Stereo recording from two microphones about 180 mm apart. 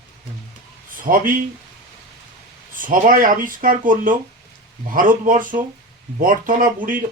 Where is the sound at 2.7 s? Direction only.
50° right (ahead or behind).